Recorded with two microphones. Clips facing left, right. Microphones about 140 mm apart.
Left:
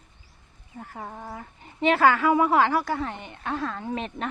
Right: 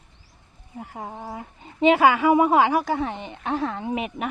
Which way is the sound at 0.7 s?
15° right (ahead or behind).